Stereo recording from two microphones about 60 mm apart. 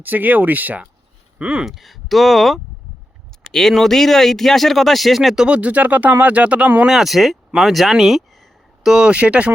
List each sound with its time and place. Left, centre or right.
0.0 s speech: right
1.4 s speech: centre
1.6 s speech: centre
5.5 s speech: right
6.8 s speech: centre
9.0 s speech: centre